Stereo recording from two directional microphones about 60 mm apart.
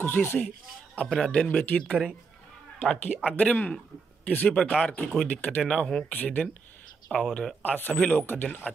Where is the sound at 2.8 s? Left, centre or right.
Left.